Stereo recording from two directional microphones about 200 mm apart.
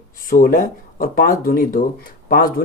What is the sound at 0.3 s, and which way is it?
Speech, 45° left (ahead or behind).